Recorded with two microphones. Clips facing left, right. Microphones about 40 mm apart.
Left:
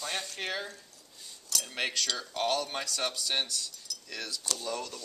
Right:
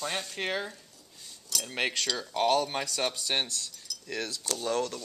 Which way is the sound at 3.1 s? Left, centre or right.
Right.